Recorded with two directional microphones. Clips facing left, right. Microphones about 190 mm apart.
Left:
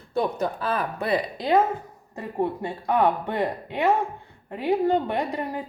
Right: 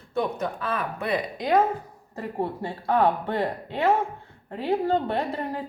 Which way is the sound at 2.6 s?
15° left (ahead or behind).